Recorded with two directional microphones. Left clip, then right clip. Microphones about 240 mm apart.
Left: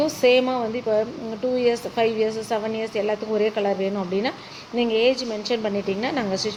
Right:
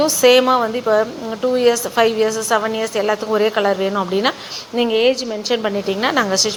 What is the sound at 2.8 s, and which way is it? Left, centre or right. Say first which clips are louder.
A woman's voice: right 6 dB; right.